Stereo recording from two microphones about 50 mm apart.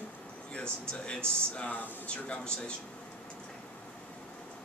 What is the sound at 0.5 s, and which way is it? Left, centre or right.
Speech, centre.